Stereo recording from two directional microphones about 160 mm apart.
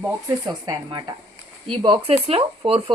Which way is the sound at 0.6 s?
25° right (ahead or behind).